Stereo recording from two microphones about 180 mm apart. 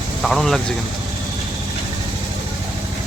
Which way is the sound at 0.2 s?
Centre (ahead or behind).